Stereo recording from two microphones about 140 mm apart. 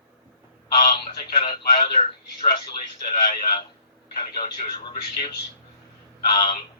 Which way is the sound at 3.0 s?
30° left (ahead or behind).